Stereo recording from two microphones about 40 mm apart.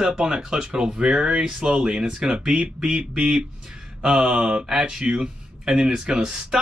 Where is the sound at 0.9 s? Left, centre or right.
Right.